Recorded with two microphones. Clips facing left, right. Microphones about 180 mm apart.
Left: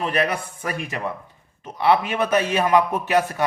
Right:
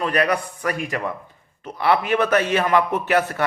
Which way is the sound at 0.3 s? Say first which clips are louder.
Right 4 dB; 25° left (ahead or behind).